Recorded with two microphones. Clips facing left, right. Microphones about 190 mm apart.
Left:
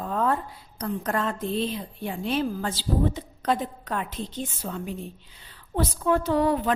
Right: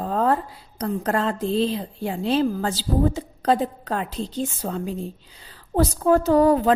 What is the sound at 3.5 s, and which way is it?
Speech, 35° right (ahead or behind).